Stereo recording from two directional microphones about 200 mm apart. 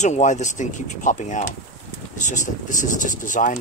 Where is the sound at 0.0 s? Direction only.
35° left (ahead or behind).